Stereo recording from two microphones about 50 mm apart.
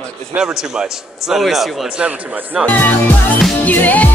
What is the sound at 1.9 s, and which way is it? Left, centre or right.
Speech, right.